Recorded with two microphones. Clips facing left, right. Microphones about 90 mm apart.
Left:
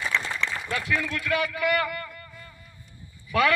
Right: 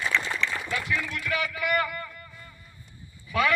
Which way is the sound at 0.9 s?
55° left (ahead or behind).